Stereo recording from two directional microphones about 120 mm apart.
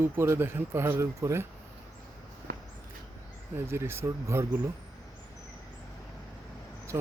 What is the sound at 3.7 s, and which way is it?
Speech, 20° right (ahead or behind).